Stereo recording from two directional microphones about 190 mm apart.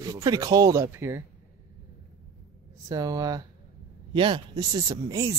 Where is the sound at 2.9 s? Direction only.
20° right (ahead or behind).